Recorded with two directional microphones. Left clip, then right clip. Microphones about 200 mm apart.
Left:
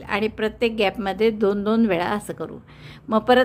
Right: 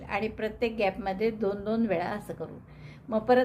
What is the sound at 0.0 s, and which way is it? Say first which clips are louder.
A woman's voice: left 8 dB; 30° left (ahead or behind).